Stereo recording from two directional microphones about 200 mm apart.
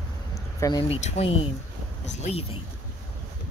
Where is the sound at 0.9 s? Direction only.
35° left (ahead or behind).